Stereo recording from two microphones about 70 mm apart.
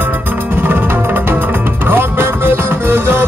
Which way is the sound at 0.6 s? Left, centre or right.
Right.